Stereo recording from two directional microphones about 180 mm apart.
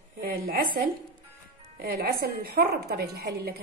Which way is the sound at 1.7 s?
60° right (ahead or behind).